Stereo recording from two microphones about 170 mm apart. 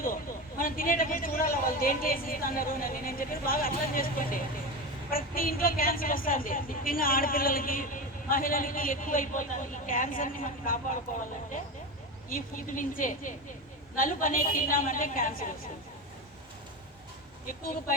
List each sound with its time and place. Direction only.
0.6 s a woman's voice: 55° left (ahead or behind)
12.3 s a woman's voice: 50° left (ahead or behind)
17.4 s a woman's voice: 55° left (ahead or behind)